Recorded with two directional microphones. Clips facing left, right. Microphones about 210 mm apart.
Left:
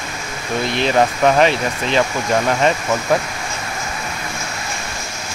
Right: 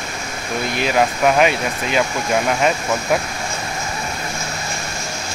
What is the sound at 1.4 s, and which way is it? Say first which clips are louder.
Speech: left 1 dB; 10° right (ahead or behind).